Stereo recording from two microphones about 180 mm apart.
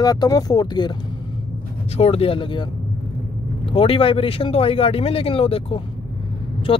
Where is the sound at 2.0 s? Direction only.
35° left (ahead or behind).